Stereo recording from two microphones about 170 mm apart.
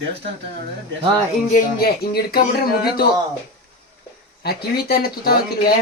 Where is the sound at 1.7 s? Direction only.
65° left (ahead or behind).